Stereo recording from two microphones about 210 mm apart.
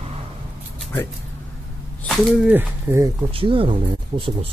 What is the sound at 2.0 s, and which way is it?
Speech, 5° right (ahead or behind).